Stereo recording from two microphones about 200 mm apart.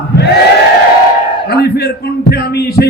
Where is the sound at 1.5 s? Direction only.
55° left (ahead or behind).